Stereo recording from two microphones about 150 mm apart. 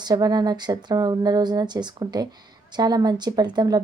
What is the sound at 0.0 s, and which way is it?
Speech, 25° right (ahead or behind).